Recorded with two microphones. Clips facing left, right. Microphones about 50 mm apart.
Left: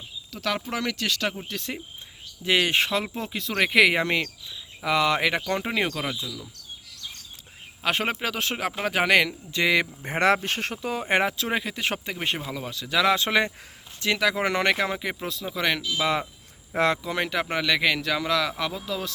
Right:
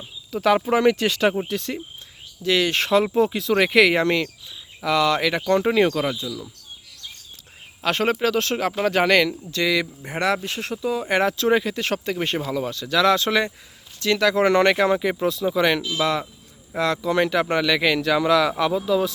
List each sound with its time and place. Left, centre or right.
0.3 s speech: centre
1.5 s speech: centre
2.4 s speech: left
2.8 s speech: centre; by 5.4 s left
5.5 s speech: centre
7.8 s speech: centre; by 11.0 s left
11.2 s speech: centre
16.0 s speech: centre